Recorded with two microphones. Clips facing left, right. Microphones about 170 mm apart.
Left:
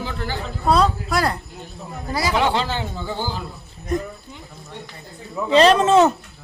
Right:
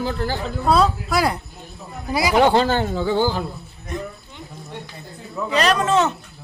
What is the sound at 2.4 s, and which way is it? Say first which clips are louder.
Speech: right 8 dB; 50° right (ahead or behind).